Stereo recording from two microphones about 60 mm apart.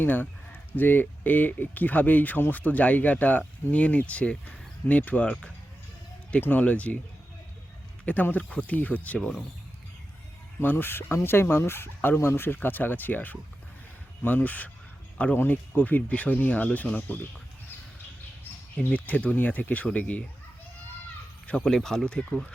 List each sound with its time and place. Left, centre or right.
0.0 s speech: left; by 5.5 s centre
6.4 s speech: left
8.0 s speech: left
10.6 s speech: left
18.8 s speech: left
21.4 s speech: centre